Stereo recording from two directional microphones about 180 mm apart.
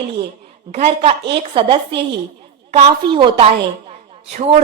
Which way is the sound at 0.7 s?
35° right (ahead or behind).